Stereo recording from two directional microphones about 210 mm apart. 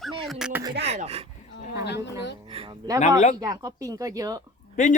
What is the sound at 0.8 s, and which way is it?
Speech, 30° right (ahead or behind).